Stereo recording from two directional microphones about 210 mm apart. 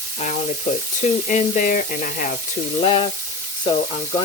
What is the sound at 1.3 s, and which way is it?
Frying, 40° left (ahead or behind).